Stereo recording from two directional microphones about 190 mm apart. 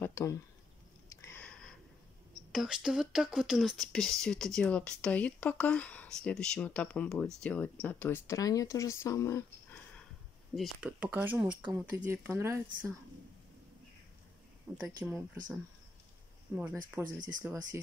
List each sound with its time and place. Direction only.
0.0 s speech: 15° left (ahead or behind)
1.0 s a sound: 15° left (ahead or behind)
2.5 s speech: centre (ahead or behind)
10.5 s speech: 5° right (ahead or behind)
14.7 s speech: 15° right (ahead or behind)
16.5 s speech: 10° right (ahead or behind)